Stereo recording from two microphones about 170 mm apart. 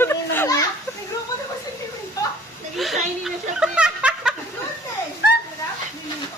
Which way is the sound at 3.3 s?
5° right (ahead or behind).